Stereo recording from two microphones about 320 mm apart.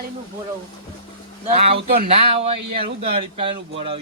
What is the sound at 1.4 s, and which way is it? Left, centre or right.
Speech, right.